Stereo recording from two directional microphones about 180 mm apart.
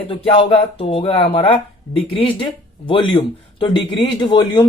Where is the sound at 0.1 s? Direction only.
30° left (ahead or behind).